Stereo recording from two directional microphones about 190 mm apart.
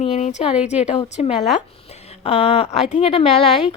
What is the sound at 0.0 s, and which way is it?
A woman's voice, 40° left (ahead or behind).